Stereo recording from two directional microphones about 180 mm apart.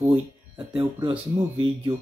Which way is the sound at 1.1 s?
10° right (ahead or behind).